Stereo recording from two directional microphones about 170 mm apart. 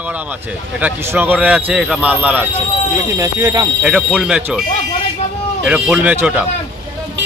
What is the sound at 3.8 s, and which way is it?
Speech, 5° right (ahead or behind).